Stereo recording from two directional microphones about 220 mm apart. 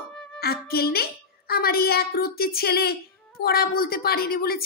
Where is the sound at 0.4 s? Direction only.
45° left (ahead or behind).